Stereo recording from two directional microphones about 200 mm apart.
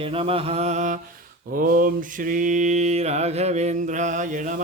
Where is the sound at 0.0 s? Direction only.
30° right (ahead or behind).